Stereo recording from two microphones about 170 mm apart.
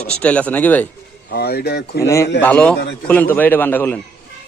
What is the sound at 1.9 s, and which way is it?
A man's voice, 15° left (ahead or behind).